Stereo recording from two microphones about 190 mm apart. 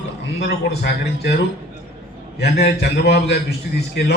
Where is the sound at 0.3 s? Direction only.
60° left (ahead or behind).